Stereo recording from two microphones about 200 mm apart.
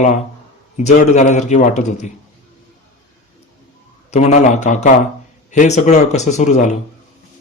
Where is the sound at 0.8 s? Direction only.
35° left (ahead or behind).